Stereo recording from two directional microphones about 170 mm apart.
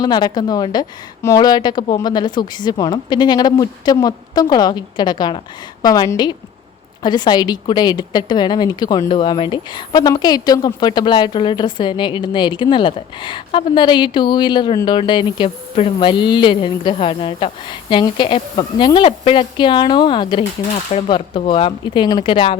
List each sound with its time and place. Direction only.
0.0 s speech: 25° left (ahead or behind)